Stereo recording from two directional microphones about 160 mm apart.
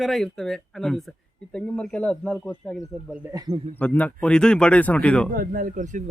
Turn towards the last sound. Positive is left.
turn(degrees=-55)  # may be behind; listen again after turning